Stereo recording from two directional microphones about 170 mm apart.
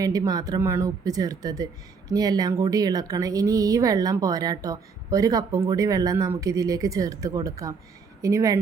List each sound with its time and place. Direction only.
0.0 s speech: 20° right (ahead or behind)